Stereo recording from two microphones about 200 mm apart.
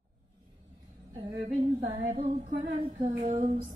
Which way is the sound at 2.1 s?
40° right (ahead or behind).